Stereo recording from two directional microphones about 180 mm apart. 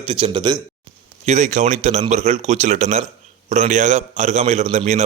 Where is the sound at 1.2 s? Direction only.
40° right (ahead or behind).